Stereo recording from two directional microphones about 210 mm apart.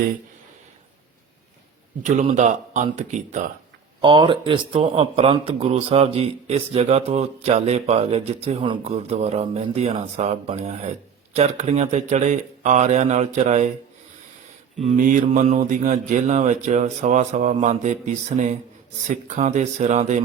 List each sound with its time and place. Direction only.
2.0 s speech: 35° right (ahead or behind)
4.0 s speech: 20° right (ahead or behind)
14.8 s speech: 35° right (ahead or behind)